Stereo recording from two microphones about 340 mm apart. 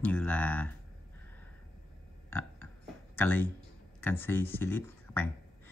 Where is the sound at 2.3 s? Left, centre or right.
Centre.